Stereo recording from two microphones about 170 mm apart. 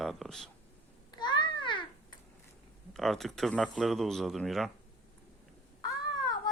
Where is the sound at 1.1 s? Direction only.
25° left (ahead or behind).